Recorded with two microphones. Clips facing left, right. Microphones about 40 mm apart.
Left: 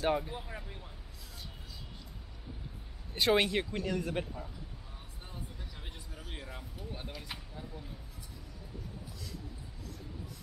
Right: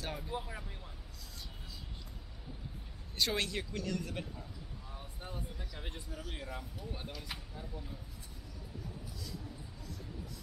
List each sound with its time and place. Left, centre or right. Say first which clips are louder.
0.0 s speech: left 11 dB; left
0.3 s speech: right 2 dB; centre
3.2 s speech: left 7 dB; left
5.3 s a sound: right 1 dB; centre
6.1 s speech: right 1 dB; centre